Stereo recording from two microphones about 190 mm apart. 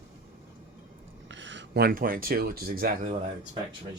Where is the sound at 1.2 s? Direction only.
75° right (ahead or behind); by 2.9 s 50° right (ahead or behind).